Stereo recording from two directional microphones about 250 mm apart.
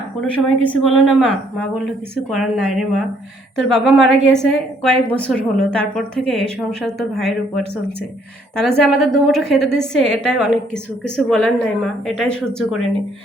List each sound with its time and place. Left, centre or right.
0.2 s a woman's voice: centre